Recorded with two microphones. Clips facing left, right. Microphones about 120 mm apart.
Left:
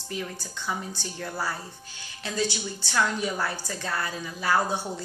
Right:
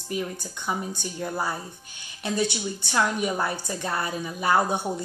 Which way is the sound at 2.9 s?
20° right (ahead or behind).